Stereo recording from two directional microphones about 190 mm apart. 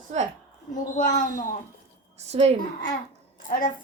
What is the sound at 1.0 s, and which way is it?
Speech, 45° left (ahead or behind).